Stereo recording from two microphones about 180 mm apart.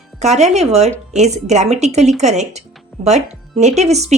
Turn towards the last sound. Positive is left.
turn(degrees=-40)  # may be behind; listen again after turning